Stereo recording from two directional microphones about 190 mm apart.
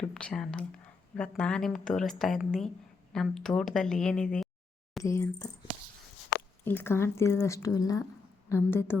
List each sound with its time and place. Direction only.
0.1 s speech: 5° left (ahead or behind)
5.0 s speech: 15° left (ahead or behind)
6.7 s speech: 10° left (ahead or behind)